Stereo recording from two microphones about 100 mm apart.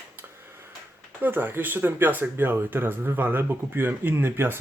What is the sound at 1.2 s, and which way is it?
Speech, 20° right (ahead or behind).